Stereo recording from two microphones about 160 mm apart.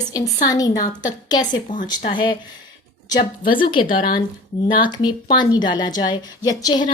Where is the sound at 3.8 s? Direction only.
60° left (ahead or behind).